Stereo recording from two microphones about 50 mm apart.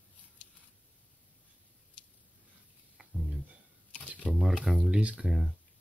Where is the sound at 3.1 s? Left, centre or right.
Centre.